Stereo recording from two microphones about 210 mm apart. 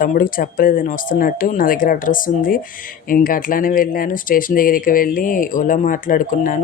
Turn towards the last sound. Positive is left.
turn(degrees=40)  # may be behind; listen again after turning